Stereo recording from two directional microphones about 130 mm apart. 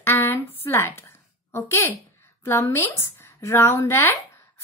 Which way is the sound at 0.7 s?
15° left (ahead or behind).